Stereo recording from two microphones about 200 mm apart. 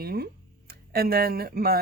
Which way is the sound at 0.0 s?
50° right (ahead or behind).